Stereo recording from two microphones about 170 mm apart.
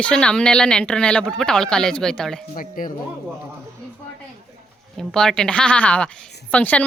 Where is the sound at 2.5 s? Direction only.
55° left (ahead or behind).